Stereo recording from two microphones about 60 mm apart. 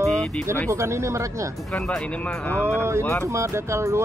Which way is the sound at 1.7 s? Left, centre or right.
Centre.